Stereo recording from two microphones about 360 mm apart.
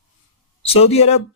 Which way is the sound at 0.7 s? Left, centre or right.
Centre.